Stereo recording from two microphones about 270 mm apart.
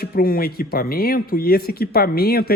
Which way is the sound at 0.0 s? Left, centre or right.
Left.